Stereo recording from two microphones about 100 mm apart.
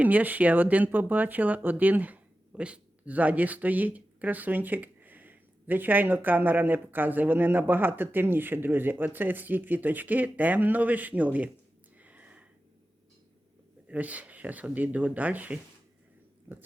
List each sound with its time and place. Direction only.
0.0 s speech: 15° right (ahead or behind)
11.9 s a sound: 15° right (ahead or behind)
13.8 s speech: 15° right (ahead or behind)